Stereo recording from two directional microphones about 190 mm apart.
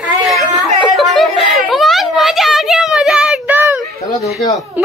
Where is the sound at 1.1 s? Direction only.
Centre (ahead or behind).